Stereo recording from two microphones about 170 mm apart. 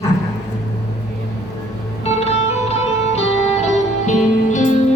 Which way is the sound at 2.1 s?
40° left (ahead or behind).